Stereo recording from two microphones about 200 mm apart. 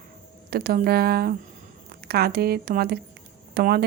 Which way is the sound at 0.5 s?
50° right (ahead or behind).